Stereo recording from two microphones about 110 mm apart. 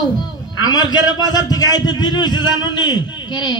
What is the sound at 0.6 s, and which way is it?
A man's voice, 40° left (ahead or behind).